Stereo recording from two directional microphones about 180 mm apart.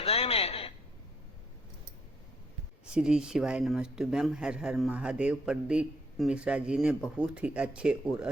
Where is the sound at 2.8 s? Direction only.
5° right (ahead or behind).